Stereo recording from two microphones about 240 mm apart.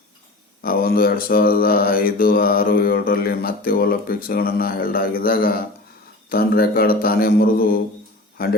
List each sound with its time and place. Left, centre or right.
0.6 s mantra: left